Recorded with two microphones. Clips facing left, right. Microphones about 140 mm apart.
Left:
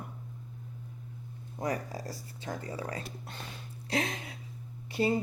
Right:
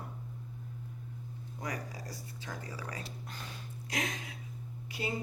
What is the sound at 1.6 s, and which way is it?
Speech, 30° left (ahead or behind).